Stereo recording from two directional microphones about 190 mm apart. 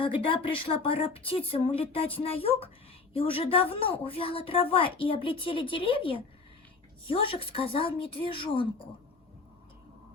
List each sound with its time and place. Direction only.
0.0 s a woman's voice: 30° left (ahead or behind)